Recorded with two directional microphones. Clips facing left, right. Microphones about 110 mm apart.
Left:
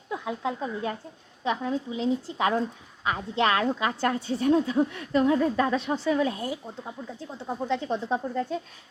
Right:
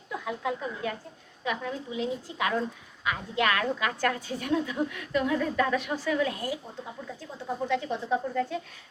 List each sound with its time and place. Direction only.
0.3 s a woman's voice: 25° left (ahead or behind)
7.7 s a woman's voice: 30° left (ahead or behind)